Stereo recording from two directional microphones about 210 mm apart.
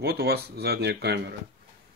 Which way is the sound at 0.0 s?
50° right (ahead or behind).